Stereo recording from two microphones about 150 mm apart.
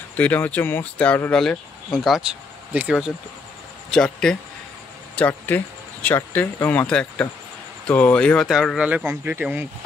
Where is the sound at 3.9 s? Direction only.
5° left (ahead or behind); by 9.6 s 15° right (ahead or behind).